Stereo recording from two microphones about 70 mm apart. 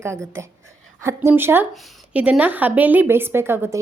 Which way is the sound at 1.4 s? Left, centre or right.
Right.